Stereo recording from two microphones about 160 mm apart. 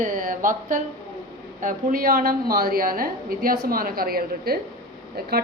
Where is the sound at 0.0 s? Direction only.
55° right (ahead or behind).